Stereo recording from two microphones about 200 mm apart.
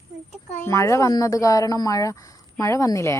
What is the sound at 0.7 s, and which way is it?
A child's voice, 15° left (ahead or behind).